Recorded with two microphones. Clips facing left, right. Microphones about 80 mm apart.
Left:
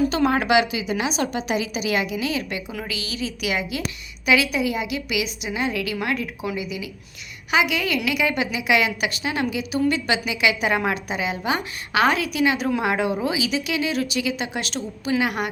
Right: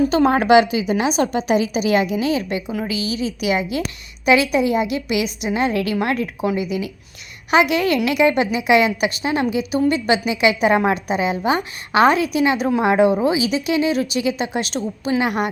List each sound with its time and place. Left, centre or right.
0.1 s a woman's voice: right